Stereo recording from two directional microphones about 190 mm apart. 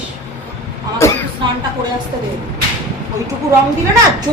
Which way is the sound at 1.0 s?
15° left (ahead or behind).